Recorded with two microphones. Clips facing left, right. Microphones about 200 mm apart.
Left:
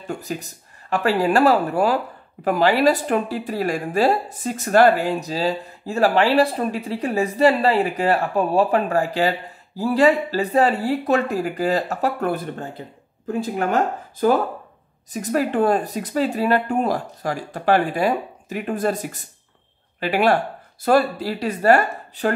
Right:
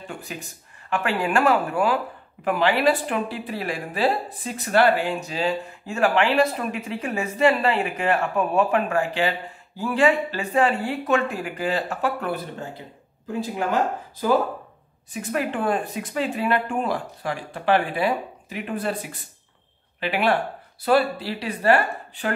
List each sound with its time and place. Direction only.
0.1 s speech: 40° left (ahead or behind)
15.1 s speech: 40° left (ahead or behind)